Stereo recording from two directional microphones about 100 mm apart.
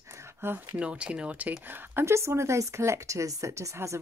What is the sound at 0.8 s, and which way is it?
Speech, 10° right (ahead or behind).